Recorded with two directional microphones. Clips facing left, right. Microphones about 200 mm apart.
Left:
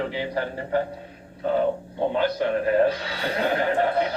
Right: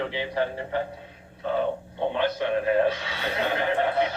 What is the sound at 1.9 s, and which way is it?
Speech, 40° left (ahead or behind).